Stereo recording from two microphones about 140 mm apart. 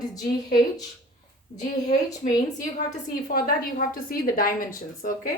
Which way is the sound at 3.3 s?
90° left.